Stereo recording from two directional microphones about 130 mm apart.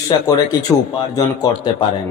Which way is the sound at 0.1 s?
30° left (ahead or behind).